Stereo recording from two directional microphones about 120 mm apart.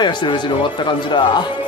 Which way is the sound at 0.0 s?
40° left (ahead or behind).